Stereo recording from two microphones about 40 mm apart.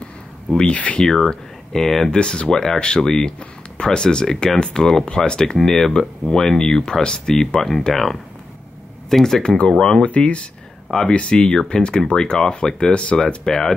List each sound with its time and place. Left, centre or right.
1.0 s speech: centre
5.6 s speech: centre
9.4 s speech: left
10.0 s speech: left
10.9 s speech: centre